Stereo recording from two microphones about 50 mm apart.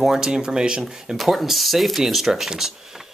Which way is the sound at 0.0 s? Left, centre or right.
Centre.